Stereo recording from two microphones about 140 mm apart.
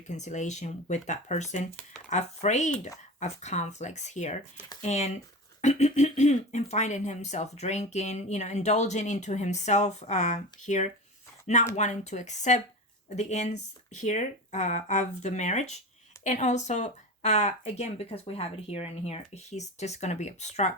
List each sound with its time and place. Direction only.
0.1 s speech: 60° left (ahead or behind)